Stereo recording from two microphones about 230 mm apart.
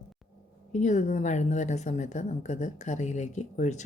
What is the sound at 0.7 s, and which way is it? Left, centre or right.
Speech, left.